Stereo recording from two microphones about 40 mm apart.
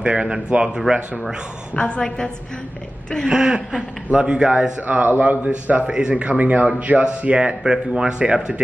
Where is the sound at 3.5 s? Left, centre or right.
Right.